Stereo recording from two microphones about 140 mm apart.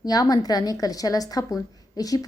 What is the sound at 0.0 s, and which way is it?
A woman's voice, 25° left (ahead or behind).